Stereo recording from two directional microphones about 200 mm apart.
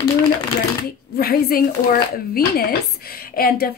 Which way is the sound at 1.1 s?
50° left (ahead or behind).